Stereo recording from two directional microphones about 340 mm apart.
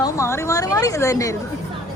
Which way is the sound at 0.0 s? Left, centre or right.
Centre.